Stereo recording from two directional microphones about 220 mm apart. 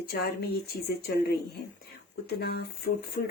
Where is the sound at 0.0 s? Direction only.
45° left (ahead or behind).